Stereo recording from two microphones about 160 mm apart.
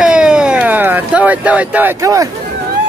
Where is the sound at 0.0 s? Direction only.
5° right (ahead or behind); by 2.2 s 20° right (ahead or behind).